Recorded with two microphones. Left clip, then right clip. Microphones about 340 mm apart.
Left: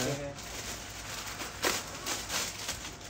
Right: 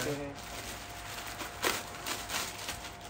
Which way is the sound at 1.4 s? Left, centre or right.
Centre.